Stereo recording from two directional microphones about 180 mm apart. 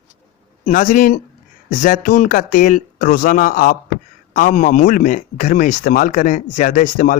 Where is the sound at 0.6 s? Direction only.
45° left (ahead or behind).